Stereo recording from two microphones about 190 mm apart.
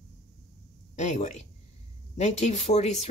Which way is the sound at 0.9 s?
35° left (ahead or behind).